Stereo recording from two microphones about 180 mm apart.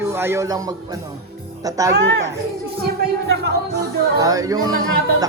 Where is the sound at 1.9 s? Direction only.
75° right (ahead or behind).